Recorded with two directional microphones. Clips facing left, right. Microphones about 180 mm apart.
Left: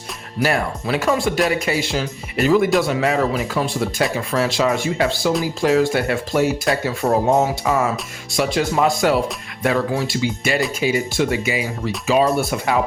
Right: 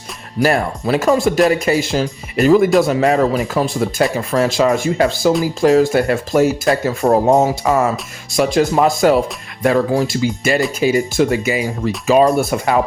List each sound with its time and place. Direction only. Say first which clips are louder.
0.4 s speech: right 4 dB; 40° right (ahead or behind)